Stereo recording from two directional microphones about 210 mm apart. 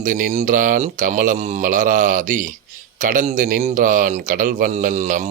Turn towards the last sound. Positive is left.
turn(degrees=-35)  # may be behind; listen again after turning